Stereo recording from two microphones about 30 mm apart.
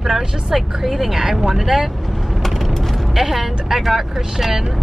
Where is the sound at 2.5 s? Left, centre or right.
Centre.